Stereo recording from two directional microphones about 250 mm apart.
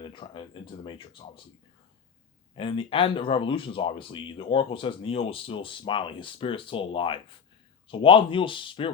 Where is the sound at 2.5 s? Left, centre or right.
Centre.